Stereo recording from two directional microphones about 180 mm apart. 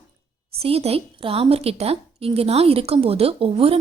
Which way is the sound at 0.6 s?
35° right (ahead or behind).